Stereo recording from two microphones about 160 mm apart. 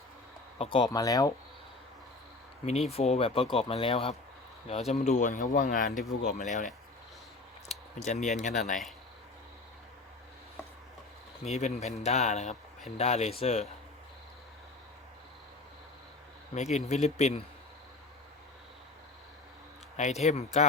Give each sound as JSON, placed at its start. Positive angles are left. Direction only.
{"t": 0.6, "sound": "speech", "side_deg": 35}
{"t": 0.9, "sound": "speech", "side_deg": 20}
{"t": 2.6, "sound": "speech", "side_deg": 40}
{"t": 7.9, "sound": "speech", "side_deg": 50}
{"t": 11.4, "sound": "speech", "side_deg": 45}
{"t": 16.6, "sound": "speech", "side_deg": 45}
{"t": 20.0, "sound": "speech", "side_deg": 45}